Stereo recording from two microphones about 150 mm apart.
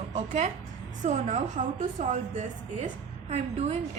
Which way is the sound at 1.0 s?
55° right (ahead or behind).